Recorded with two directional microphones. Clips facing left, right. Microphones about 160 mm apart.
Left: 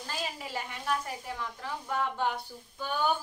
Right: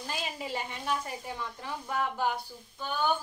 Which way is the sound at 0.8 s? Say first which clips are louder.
Left 2 dB; 20° right (ahead or behind).